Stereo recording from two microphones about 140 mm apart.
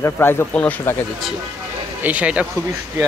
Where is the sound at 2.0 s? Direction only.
10° right (ahead or behind).